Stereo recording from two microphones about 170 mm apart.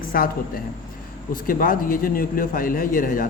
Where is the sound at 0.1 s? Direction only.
60° left (ahead or behind).